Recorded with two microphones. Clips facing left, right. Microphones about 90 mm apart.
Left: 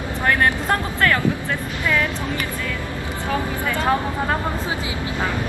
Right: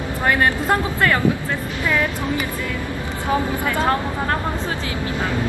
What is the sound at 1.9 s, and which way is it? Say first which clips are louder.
Speech: right 1 dB; 15° right (ahead or behind).